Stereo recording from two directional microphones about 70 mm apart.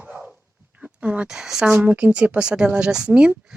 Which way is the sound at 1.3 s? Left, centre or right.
Centre.